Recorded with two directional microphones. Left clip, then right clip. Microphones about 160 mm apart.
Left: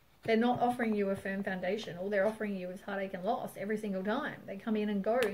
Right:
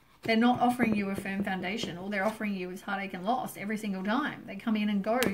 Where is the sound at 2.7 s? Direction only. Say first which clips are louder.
Right 3 dB; 25° left (ahead or behind).